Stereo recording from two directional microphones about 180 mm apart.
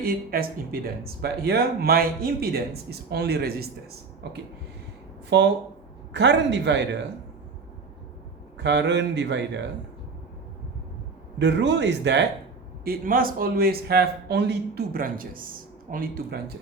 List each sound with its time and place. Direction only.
0.0 s speech: 55° right (ahead or behind)
5.3 s speech: 70° right (ahead or behind)
8.5 s speech: 75° right (ahead or behind)
11.3 s speech: 75° right (ahead or behind)
12.8 s a man's voice: 55° right (ahead or behind)